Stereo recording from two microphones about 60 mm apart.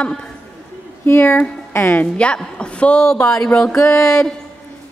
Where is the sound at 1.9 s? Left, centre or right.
Left.